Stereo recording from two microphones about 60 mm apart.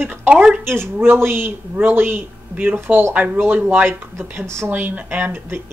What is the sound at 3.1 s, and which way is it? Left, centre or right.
Speech, right.